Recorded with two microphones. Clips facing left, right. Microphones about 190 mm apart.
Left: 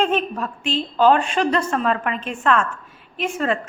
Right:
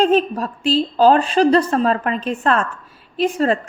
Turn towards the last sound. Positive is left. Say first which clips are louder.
# right 5 dB
turn(degrees=-35)  # may be behind; listen again after turning